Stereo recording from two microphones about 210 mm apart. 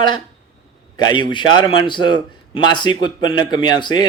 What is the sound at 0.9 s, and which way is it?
A man's voice, 20° left (ahead or behind).